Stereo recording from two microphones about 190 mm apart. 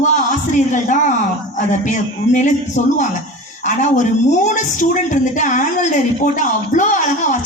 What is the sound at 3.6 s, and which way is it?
A woman's voice, 40° left (ahead or behind).